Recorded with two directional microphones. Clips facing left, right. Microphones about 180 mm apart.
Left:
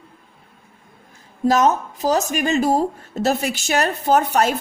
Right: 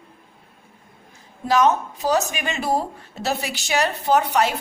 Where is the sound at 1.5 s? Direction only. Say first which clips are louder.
Left 1 dB; 40° left (ahead or behind).